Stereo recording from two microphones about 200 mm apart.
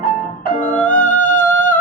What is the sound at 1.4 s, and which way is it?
Music, 10° left (ahead or behind).